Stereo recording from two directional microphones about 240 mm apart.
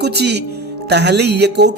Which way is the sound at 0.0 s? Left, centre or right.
Right.